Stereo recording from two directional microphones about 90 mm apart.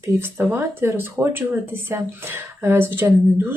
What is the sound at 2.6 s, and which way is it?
Speech, 25° right (ahead or behind).